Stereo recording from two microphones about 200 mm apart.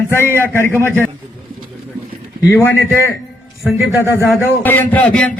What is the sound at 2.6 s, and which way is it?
Speech, 10° left (ahead or behind).